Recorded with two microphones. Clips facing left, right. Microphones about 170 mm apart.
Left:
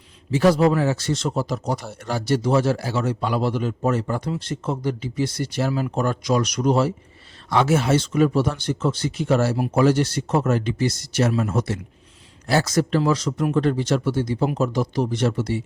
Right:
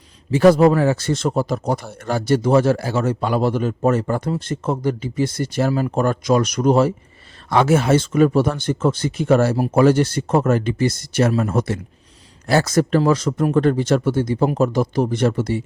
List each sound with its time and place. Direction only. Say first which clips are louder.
0.3 s a man's voice: right 5 dB; 55° right (ahead or behind)